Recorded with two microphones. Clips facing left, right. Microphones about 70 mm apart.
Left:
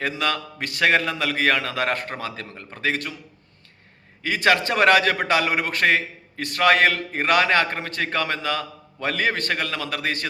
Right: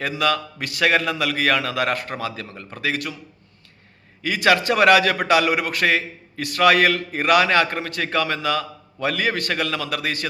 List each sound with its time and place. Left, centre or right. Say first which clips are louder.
0.0 s a man's voice: right 3 dB; left
4.2 s a man's voice: right 1 dB; left